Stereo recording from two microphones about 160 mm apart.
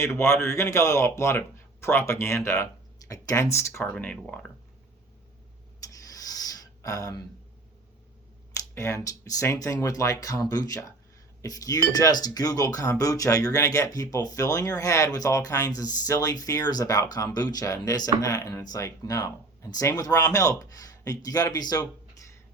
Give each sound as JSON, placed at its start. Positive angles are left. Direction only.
{"t": 0.0, "sound": "speech", "side_deg": 15}
{"t": 5.9, "sound": "a sound", "side_deg": 20}
{"t": 8.7, "sound": "speech", "side_deg": 20}